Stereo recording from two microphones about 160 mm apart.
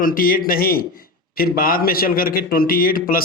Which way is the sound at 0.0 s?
60° left (ahead or behind).